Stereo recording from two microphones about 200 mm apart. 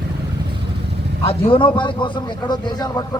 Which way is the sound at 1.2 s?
25° left (ahead or behind).